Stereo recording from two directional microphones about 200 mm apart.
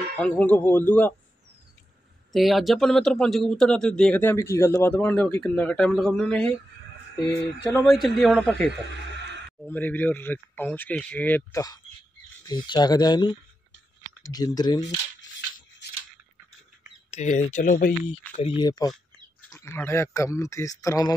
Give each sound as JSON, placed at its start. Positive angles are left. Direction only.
{"t": 0.1, "sound": "speech", "side_deg": 5}
{"t": 2.3, "sound": "speech", "side_deg": 0}
{"t": 7.6, "sound": "speech", "side_deg": 5}
{"t": 15.8, "sound": "a sound", "side_deg": 60}
{"t": 17.1, "sound": "speech", "side_deg": 35}
{"t": 18.6, "sound": "speech", "side_deg": 20}